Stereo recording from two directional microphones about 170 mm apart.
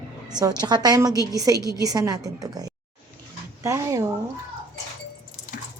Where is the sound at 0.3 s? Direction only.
25° right (ahead or behind).